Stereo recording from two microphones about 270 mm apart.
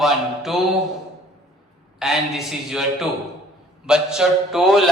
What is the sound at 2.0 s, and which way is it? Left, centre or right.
Speech, centre.